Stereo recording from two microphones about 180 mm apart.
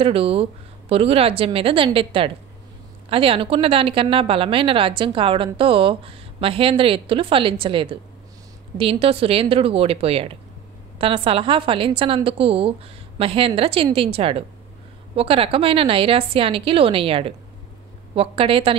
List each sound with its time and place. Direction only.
0.0 s speech: 30° right (ahead or behind)